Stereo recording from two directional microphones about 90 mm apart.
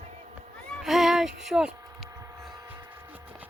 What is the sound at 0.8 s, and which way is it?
Music, centre (ahead or behind).